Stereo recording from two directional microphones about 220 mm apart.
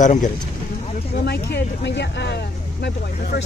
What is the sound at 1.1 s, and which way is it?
Speech, 50° left (ahead or behind).